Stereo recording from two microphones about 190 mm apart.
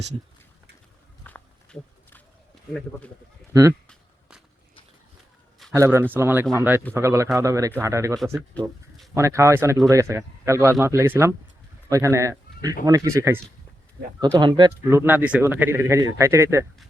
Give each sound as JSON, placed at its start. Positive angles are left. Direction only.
{"t": 1.2, "sound": "walk", "side_deg": 10}
{"t": 3.5, "sound": "speech", "side_deg": -20}
{"t": 5.7, "sound": "speech", "side_deg": -15}
{"t": 8.6, "sound": "speech", "side_deg": 5}
{"t": 9.1, "sound": "speech", "side_deg": -15}
{"t": 14.8, "sound": "speech", "side_deg": -10}